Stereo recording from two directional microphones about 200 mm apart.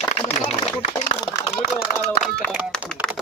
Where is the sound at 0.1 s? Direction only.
35° left (ahead or behind).